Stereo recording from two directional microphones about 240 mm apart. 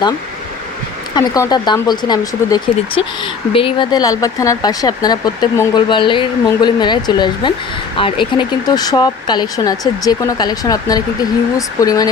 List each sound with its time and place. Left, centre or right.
1.1 s speech: centre